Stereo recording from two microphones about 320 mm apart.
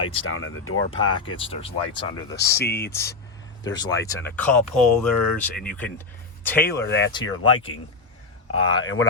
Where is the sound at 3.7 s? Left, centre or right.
Centre.